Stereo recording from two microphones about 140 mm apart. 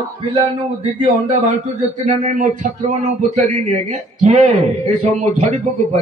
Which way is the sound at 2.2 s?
65° right (ahead or behind).